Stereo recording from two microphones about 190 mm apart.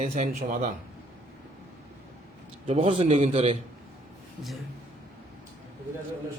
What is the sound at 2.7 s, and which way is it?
Speech, 30° right (ahead or behind).